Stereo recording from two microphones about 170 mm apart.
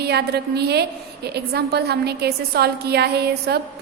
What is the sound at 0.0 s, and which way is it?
A woman's voice, 70° right (ahead or behind).